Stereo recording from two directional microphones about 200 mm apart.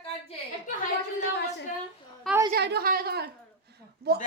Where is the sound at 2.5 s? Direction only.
55° right (ahead or behind).